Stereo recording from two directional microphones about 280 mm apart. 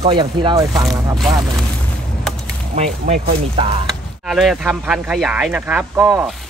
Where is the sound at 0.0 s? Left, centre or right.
Centre.